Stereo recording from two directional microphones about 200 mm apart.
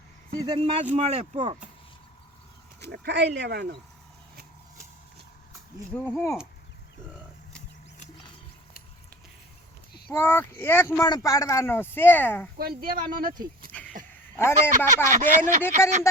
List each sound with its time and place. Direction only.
0.4 s speech: 25° right (ahead or behind)
2.8 s speech: 55° right (ahead or behind)
5.9 s speech: 5° left (ahead or behind)
10.1 s speech: 10° left (ahead or behind)
12.5 s speech: 50° right (ahead or behind)
13.7 s a sound: 5° left (ahead or behind)
14.3 s speech: 10° left (ahead or behind)
15.1 s speech: 40° right (ahead or behind)